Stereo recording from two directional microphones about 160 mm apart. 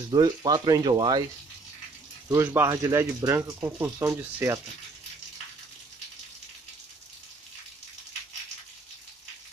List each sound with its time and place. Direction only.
0.1 s speech: 25° right (ahead or behind)
2.2 s speech: 20° right (ahead or behind)